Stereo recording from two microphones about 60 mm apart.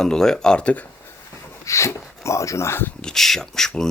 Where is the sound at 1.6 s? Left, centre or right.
Left.